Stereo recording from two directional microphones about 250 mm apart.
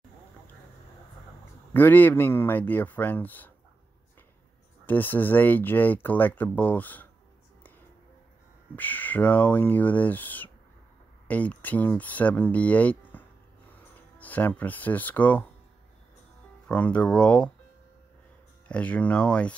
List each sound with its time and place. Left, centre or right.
1.7 s speech: centre
4.8 s speech: centre
8.7 s speech: centre
16.6 s speech: centre
18.7 s speech: centre